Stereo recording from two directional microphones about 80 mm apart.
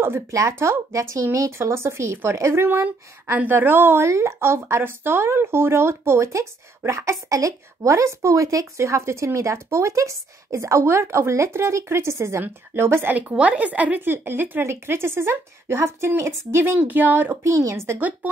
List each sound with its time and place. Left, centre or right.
0.0 s a woman's voice: right